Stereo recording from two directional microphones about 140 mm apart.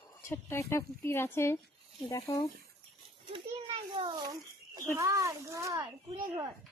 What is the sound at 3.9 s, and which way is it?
A child's voice, 35° right (ahead or behind).